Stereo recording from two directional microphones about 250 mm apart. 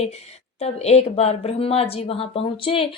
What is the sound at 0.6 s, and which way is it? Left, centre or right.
Speech, left.